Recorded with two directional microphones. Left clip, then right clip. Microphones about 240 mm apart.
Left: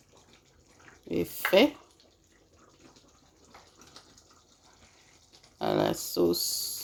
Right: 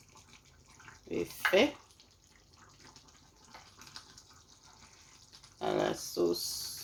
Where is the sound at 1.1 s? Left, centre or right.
Left.